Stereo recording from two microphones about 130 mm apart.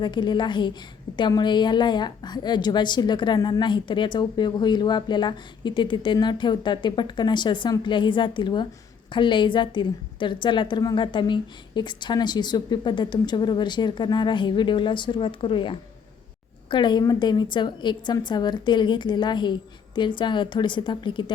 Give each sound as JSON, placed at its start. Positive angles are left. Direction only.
{"t": 0.0, "sound": "a woman's voice", "side_deg": 35}